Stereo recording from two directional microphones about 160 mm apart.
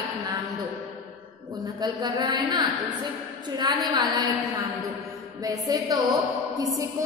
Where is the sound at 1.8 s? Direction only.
25° right (ahead or behind).